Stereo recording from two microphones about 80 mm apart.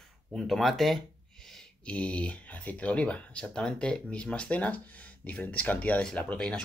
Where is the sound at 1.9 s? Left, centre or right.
Centre.